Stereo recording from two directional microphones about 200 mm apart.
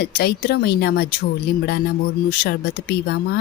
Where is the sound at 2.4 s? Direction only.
55° left (ahead or behind).